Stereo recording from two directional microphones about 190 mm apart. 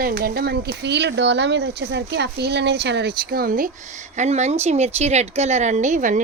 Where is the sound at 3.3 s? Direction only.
50° right (ahead or behind).